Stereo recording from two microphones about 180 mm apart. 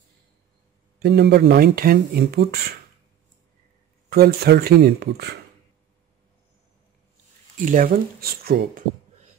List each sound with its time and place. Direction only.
0.9 s speech: 60° right (ahead or behind)
4.1 s speech: 60° right (ahead or behind)
7.5 s speech: 50° right (ahead or behind)